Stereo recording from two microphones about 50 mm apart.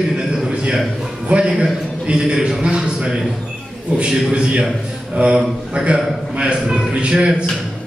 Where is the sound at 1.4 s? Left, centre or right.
Centre.